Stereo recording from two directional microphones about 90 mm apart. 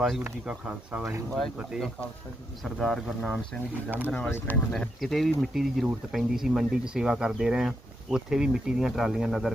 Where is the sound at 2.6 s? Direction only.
5° left (ahead or behind).